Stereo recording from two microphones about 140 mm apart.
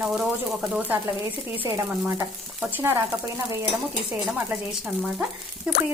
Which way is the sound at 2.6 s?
15° right (ahead or behind).